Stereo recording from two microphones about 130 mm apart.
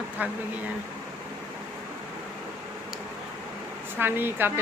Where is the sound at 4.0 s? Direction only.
15° right (ahead or behind).